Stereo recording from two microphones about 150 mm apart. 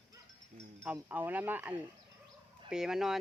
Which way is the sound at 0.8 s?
10° right (ahead or behind).